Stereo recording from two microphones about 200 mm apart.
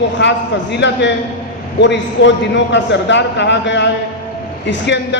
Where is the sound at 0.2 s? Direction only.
60° left (ahead or behind).